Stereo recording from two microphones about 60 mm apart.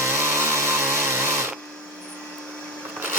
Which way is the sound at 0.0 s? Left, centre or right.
Right.